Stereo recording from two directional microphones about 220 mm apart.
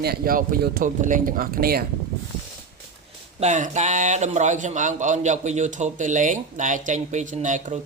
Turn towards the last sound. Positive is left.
turn(degrees=-35)  # may be behind; listen again after turning